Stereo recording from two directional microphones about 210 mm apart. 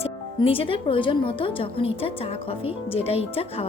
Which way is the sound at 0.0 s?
25° left (ahead or behind).